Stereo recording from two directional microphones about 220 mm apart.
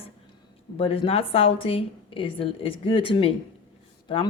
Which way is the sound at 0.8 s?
25° left (ahead or behind).